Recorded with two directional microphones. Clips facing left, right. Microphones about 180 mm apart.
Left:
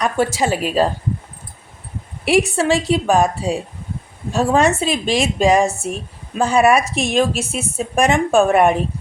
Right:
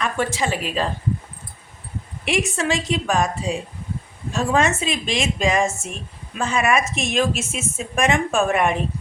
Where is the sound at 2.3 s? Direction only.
35° left (ahead or behind).